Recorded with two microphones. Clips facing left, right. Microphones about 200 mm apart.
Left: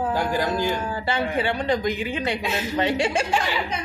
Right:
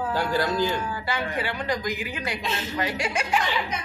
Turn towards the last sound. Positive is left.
turn(degrees=30)  # may be behind; listen again after turning